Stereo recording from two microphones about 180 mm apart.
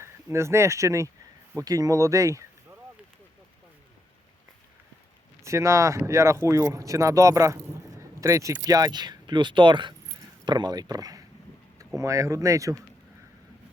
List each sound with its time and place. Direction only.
0.0 s speech: 15° right (ahead or behind)
5.4 s speech: 15° right (ahead or behind)